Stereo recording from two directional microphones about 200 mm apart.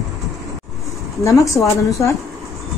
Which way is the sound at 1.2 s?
15° left (ahead or behind).